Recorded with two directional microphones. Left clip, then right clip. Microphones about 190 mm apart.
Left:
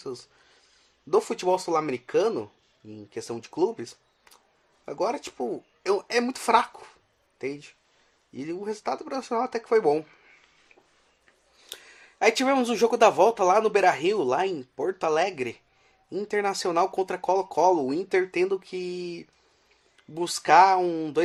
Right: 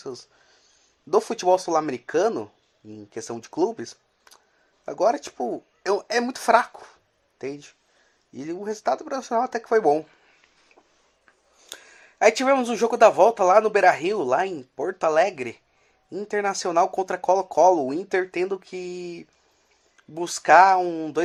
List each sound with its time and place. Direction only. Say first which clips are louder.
1.1 s speech: right 4 dB; 15° right (ahead or behind)
11.7 s speech: right 1 dB; 10° right (ahead or behind)